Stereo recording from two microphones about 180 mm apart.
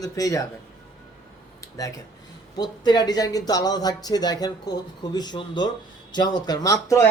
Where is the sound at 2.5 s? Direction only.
25° left (ahead or behind).